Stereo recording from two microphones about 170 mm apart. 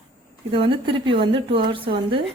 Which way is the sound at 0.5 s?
30° right (ahead or behind).